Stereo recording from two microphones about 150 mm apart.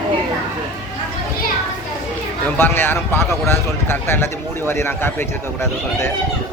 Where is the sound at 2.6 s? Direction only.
15° left (ahead or behind).